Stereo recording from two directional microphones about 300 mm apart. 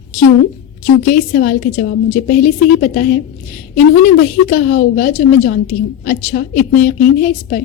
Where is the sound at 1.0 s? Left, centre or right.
Left.